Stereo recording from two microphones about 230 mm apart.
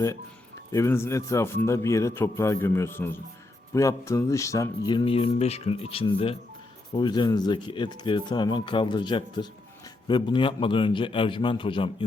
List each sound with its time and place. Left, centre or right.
0.7 s a man's voice: centre